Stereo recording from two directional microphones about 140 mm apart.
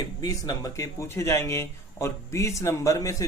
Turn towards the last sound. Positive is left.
turn(degrees=25)  # may be behind; listen again after turning